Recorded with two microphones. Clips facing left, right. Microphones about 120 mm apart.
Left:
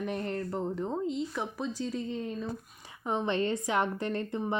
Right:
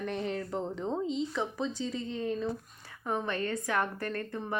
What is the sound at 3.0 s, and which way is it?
Speech, 20° left (ahead or behind).